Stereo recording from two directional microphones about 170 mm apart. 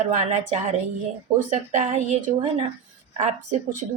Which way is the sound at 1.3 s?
45° right (ahead or behind).